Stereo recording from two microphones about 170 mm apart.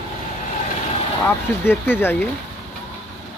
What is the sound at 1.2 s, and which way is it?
Speech, 10° left (ahead or behind).